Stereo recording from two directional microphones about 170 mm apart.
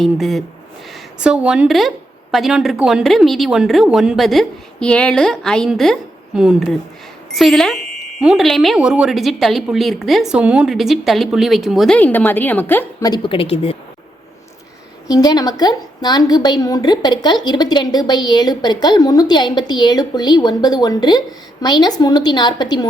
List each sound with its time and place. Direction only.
0.0 s a woman's voice: centre (ahead or behind)
11.9 s a woman's voice: 10° left (ahead or behind)
13.1 s a woman's voice: 25° left (ahead or behind)
15.0 s a woman's voice: 20° left (ahead or behind)